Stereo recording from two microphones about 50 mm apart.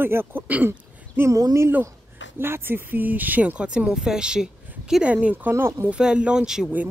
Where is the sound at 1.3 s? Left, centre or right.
Right.